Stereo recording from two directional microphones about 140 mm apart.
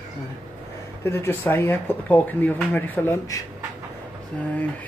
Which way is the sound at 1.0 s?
20° left (ahead or behind).